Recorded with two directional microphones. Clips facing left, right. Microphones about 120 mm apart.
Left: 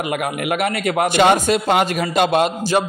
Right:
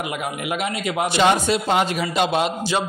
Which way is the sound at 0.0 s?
60° left (ahead or behind).